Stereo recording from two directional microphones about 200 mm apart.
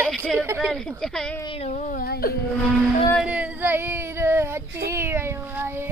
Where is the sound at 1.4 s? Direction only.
30° left (ahead or behind); by 2.4 s 50° left (ahead or behind).